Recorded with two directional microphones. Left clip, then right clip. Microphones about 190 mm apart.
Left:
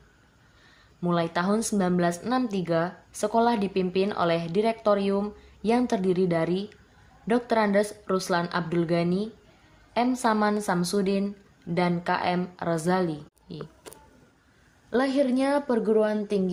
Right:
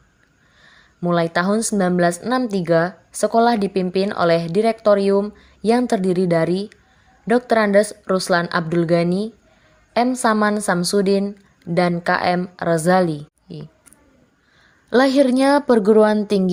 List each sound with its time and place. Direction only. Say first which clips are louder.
1.0 s a woman's voice: right 7 dB; 35° right (ahead or behind)
14.8 s a woman's voice: right 9 dB; 45° right (ahead or behind)